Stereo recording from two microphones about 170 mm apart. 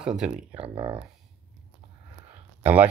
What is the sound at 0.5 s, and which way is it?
Speech, 30° right (ahead or behind).